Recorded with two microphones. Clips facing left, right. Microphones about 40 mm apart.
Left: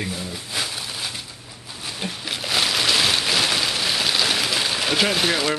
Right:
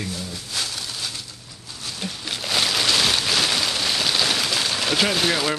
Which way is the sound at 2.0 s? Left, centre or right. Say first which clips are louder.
Left 1 dB; centre.